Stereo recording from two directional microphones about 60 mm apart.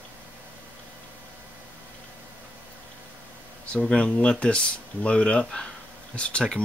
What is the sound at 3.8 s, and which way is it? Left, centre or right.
Speech, centre.